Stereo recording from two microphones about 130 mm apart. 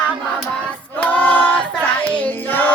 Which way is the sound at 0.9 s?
15° left (ahead or behind).